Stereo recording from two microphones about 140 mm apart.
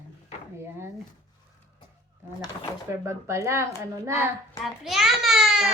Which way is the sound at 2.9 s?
20° right (ahead or behind).